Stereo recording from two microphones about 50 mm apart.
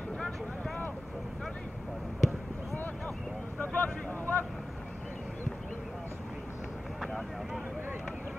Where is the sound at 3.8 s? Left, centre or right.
Left.